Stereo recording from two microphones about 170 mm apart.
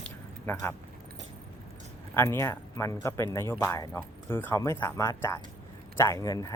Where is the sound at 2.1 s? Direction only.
15° left (ahead or behind).